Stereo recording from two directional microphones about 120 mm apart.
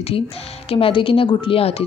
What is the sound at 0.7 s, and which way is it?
Speech, 50° left (ahead or behind).